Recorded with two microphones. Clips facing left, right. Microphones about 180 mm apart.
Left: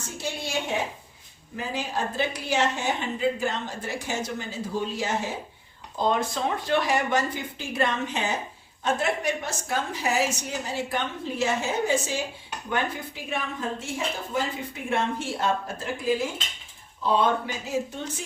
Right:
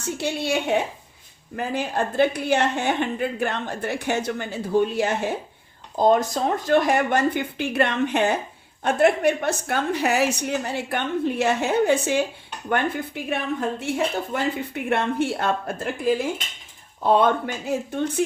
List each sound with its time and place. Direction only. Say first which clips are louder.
0.2 s a woman's voice: right 5 dB; 65° right (ahead or behind)
6.0 s a woman's voice: right 6 dB; 40° right (ahead or behind); by 15.9 s 60° right (ahead or behind)
17.0 s a woman's voice: right 5 dB; 55° right (ahead or behind)